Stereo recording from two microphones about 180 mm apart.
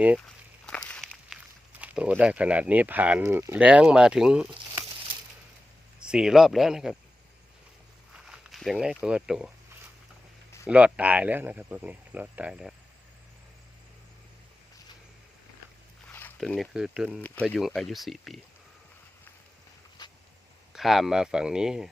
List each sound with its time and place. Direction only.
0.7 s walk: 5° left (ahead or behind)
1.8 s speech: 5° right (ahead or behind)
6.0 s speech: 5° right (ahead or behind)
8.1 s speech: 5° right (ahead or behind)
10.7 s speech: 5° right (ahead or behind)
16.4 s speech: centre (ahead or behind)
17.1 s speech: 10° left (ahead or behind)
20.0 s a sound: 20° left (ahead or behind)
20.7 s speech: centre (ahead or behind)